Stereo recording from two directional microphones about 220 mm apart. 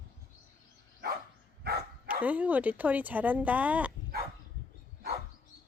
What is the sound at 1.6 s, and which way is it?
Dog, 45° right (ahead or behind).